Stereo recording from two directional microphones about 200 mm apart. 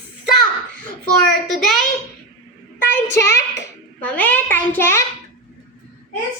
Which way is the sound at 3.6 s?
10° left (ahead or behind).